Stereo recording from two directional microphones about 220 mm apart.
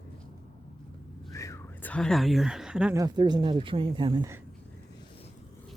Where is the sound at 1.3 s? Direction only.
15° left (ahead or behind); by 3.0 s 5° right (ahead or behind).